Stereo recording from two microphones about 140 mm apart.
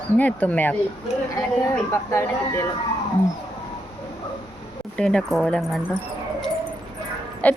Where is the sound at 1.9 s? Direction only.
20° left (ahead or behind).